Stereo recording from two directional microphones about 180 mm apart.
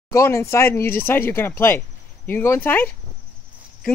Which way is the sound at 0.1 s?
15° left (ahead or behind).